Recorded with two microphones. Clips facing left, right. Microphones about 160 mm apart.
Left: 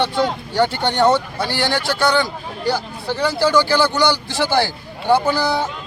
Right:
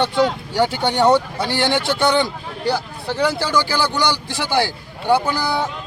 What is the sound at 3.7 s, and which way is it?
A man's voice, 15° right (ahead or behind).